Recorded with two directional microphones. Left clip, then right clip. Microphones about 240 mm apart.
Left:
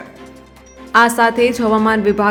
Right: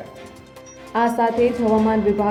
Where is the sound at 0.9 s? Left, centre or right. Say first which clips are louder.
Left 7 dB; centre.